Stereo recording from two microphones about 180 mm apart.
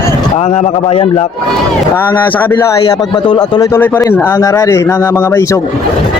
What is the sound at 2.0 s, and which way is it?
A man's voice, 10° left (ahead or behind).